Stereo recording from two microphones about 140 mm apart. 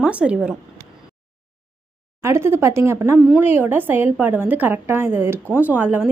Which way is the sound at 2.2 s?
20° right (ahead or behind).